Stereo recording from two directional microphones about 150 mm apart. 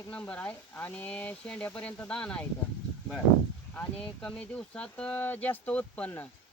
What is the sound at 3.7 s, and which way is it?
Speech, 10° left (ahead or behind).